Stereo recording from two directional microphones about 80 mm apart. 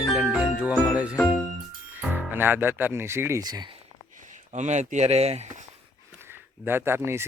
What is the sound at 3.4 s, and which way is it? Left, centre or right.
Speech, right.